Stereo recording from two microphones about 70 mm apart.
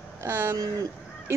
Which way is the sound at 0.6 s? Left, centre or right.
Right.